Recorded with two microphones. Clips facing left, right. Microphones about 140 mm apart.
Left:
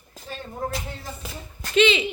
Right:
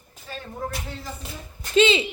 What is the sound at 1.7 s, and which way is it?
Speech, 30° right (ahead or behind).